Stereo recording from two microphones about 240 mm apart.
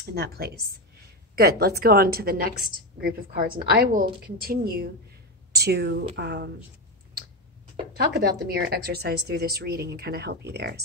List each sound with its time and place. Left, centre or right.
0.1 s a woman's voice: right
8.1 s a woman's voice: right